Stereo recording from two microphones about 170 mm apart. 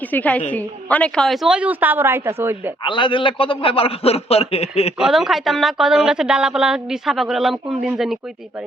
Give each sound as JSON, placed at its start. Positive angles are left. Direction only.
{"t": 0.1, "sound": "a woman's voice", "side_deg": 10}
{"t": 2.8, "sound": "a man's voice", "side_deg": 30}
{"t": 4.9, "sound": "a man's voice", "side_deg": 0}